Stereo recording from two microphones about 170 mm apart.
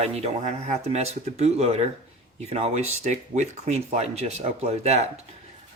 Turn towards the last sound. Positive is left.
turn(degrees=-40)  # may be behind; listen again after turning